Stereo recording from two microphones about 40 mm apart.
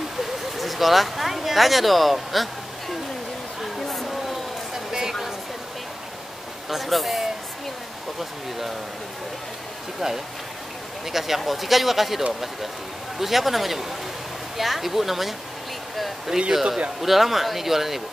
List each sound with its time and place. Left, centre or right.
0.2 s speech: centre
3.9 s a sound: centre
4.7 s a sound: centre
6.7 s speech: centre
9.9 s speech: centre
13.2 s speech: centre
16.3 s speech: centre
17.0 s speech: centre